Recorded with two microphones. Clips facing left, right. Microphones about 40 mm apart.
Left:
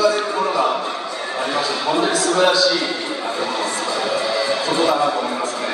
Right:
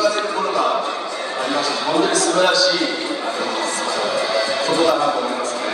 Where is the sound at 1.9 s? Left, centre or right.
Centre.